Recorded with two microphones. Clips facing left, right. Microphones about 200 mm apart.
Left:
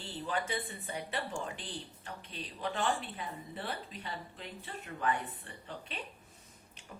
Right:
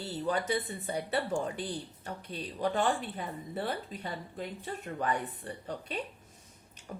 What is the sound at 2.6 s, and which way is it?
Speech, 40° right (ahead or behind).